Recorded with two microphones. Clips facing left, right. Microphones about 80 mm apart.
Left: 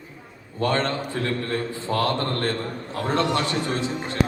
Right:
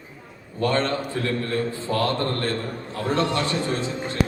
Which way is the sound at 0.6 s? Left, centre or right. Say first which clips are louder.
Right 1 dB; left.